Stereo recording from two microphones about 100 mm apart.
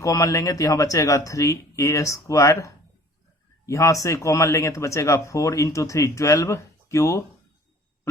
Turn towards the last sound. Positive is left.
turn(degrees=30)  # may be behind; listen again after turning